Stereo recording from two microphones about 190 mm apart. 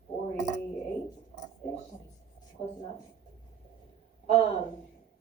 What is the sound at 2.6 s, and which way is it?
Speech, 35° left (ahead or behind).